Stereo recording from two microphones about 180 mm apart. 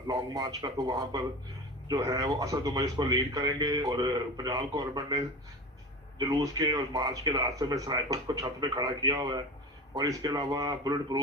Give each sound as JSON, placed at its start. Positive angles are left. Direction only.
{"t": 0.1, "sound": "speech", "side_deg": -20}